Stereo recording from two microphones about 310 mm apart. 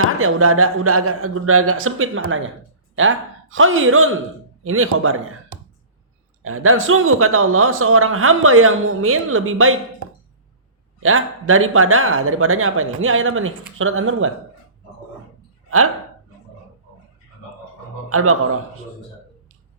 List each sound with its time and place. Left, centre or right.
0.0 s a man's voice: right
11.0 s speech: right
18.1 s a man's voice: right